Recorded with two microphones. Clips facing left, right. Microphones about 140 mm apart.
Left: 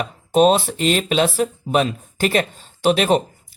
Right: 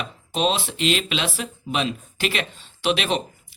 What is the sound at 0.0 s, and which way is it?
Speech, 45° left (ahead or behind).